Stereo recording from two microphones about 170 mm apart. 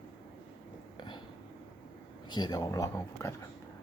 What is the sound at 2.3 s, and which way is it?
Speech, 25° left (ahead or behind).